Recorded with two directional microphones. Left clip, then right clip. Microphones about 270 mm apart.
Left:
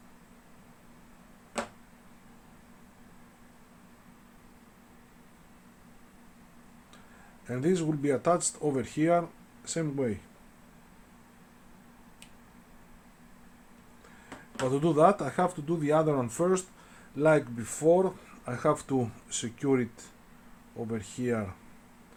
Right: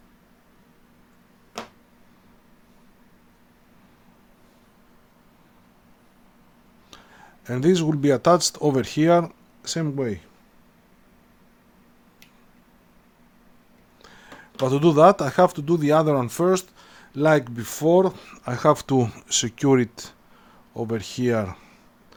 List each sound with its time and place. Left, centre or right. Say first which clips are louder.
7.4 s speech: right 8 dB; right
14.7 s speech: right 8 dB; right